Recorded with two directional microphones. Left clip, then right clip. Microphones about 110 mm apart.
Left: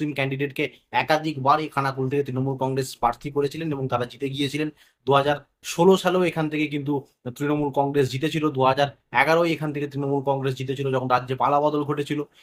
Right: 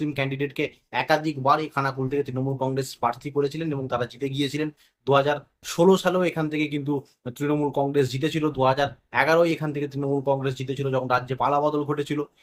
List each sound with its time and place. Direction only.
0.0 s speech: 15° left (ahead or behind)